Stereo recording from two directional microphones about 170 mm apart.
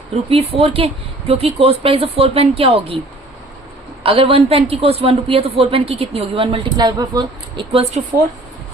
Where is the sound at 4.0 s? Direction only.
35° right (ahead or behind).